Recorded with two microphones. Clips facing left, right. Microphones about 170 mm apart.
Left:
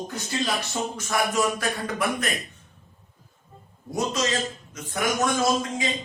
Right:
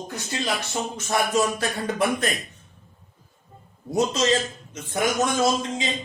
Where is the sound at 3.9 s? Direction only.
25° right (ahead or behind).